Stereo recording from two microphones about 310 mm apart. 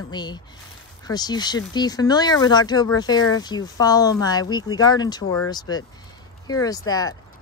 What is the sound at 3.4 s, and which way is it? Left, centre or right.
Speech, centre.